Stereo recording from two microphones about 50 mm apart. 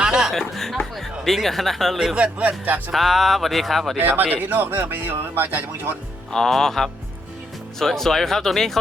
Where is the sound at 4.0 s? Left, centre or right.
Right.